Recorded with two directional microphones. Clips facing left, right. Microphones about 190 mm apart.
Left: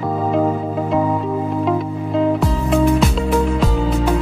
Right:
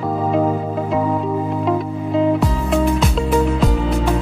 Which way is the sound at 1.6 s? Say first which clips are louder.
Even; centre (ahead or behind).